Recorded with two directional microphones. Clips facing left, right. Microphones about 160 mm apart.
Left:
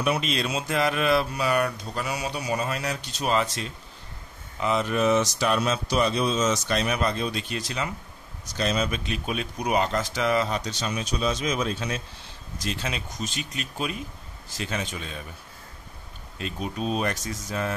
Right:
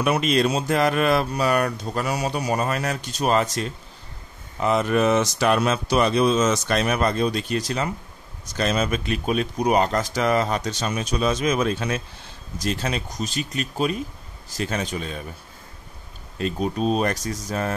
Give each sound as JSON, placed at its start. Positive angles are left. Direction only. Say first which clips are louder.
{"t": 0.0, "sound": "speech", "louder": "right 6 dB", "side_deg": -50}
{"t": 8.5, "sound": "speech", "louder": "right 3 dB", "side_deg": -55}
{"t": 12.6, "sound": "speech", "louder": "right 5 dB", "side_deg": -40}
{"t": 16.3, "sound": "speech", "louder": "right 7 dB", "side_deg": -40}